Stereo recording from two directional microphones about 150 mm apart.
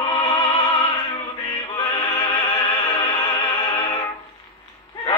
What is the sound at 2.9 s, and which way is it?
Opera, 35° left (ahead or behind).